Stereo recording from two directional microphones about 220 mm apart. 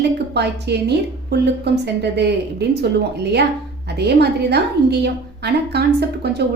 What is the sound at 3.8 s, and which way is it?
A woman's voice, 50° right (ahead or behind).